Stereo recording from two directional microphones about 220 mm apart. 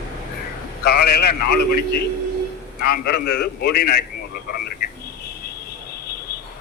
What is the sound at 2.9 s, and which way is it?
A man's voice, 45° left (ahead or behind).